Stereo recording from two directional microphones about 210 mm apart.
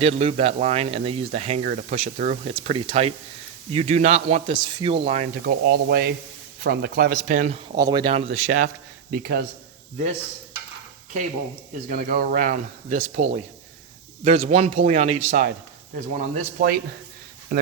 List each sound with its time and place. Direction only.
0.0 s speech: 30° right (ahead or behind)
5.5 s speech: 50° right (ahead or behind)
7.8 s speech: 20° right (ahead or behind); by 9.4 s 45° right (ahead or behind)
11.9 s speech: 40° right (ahead or behind)
16.1 s speech: 45° right (ahead or behind)